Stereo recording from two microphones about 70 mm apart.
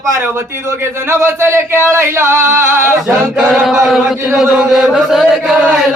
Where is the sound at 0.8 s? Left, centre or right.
Right.